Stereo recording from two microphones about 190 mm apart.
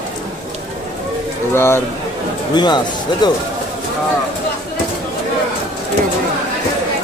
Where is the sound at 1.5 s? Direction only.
15° left (ahead or behind).